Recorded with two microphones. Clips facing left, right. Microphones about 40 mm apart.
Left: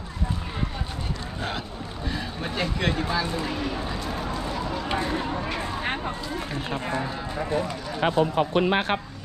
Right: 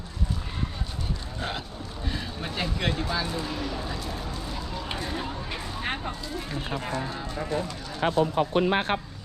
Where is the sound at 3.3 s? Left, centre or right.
Centre.